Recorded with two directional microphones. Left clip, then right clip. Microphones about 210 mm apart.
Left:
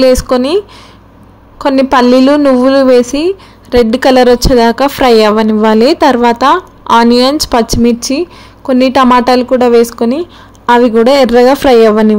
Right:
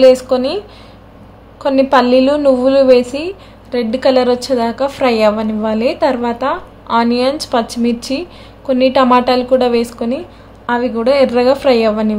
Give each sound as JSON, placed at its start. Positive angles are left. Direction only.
{"t": 0.0, "sound": "a woman's voice", "side_deg": 35}
{"t": 1.6, "sound": "a woman's voice", "side_deg": 35}